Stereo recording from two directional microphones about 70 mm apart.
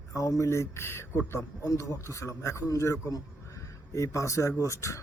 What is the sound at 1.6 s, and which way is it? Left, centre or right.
Speech, left.